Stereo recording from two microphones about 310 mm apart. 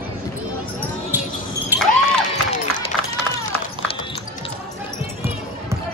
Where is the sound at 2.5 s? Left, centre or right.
Left.